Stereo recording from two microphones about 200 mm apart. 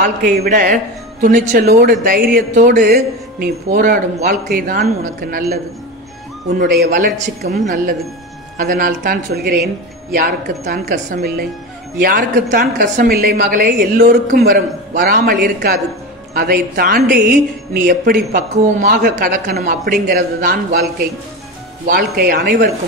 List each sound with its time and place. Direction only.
0.0 s a woman's voice: 50° right (ahead or behind)
1.6 s a woman's voice: 50° right (ahead or behind)
6.6 s a woman's voice: 50° right (ahead or behind)
21.8 s a woman's voice: 50° right (ahead or behind)